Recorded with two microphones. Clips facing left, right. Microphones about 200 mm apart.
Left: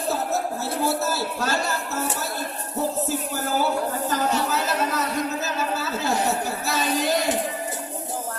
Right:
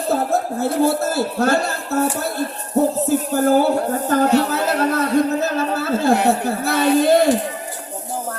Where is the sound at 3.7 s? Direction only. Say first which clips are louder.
Right 7 dB; 55° right (ahead or behind).